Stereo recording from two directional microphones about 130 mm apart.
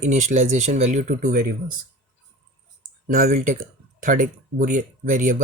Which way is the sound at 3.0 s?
90° right.